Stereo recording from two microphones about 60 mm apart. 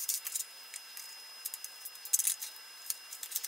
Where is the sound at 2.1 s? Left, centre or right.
Centre.